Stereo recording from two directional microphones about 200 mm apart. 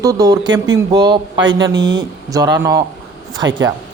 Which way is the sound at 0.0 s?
20° right (ahead or behind).